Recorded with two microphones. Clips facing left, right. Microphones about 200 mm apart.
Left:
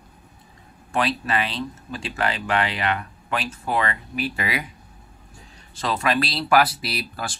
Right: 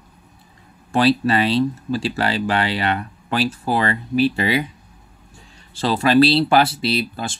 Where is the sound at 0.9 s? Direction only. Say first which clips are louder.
Right 7 dB; 30° right (ahead or behind).